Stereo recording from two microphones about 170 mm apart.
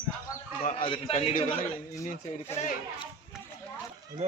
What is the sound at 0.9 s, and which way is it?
Speech, 30° left (ahead or behind).